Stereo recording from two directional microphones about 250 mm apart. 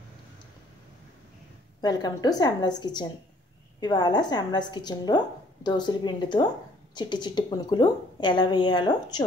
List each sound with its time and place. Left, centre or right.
1.8 s a woman's voice: centre